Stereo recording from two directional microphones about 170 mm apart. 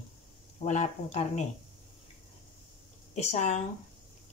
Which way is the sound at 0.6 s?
45° left (ahead or behind).